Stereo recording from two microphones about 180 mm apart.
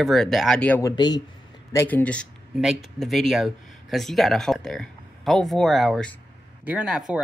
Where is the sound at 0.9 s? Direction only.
25° left (ahead or behind).